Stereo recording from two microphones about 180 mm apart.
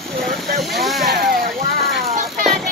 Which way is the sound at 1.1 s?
60° right (ahead or behind).